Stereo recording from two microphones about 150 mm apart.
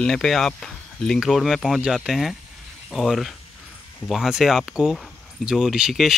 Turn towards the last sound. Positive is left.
turn(degrees=-5)  # may be behind; listen again after turning